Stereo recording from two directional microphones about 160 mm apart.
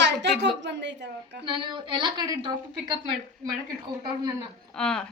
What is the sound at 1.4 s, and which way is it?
A woman's voice, 30° right (ahead or behind).